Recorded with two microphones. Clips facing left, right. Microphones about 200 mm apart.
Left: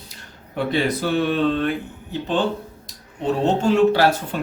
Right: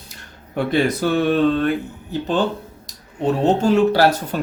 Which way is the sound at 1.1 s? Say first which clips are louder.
Right 3 dB; 45° right (ahead or behind).